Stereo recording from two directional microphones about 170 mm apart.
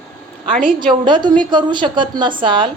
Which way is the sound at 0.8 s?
25° right (ahead or behind).